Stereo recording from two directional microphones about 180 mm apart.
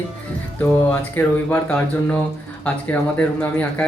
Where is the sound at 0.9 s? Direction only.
10° left (ahead or behind).